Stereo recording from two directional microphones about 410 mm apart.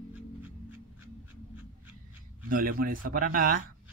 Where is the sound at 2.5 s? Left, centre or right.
Centre.